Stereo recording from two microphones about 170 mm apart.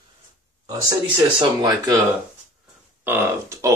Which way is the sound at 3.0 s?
15° right (ahead or behind).